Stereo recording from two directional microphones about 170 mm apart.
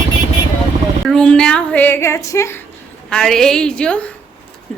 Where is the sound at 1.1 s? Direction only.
5° left (ahead or behind).